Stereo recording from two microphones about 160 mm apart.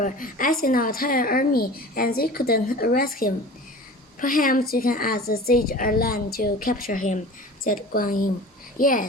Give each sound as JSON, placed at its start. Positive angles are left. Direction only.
{"t": 0.0, "sound": "speech", "side_deg": 60}